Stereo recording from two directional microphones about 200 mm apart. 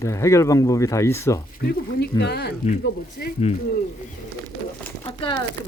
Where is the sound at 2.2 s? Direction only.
55° left (ahead or behind).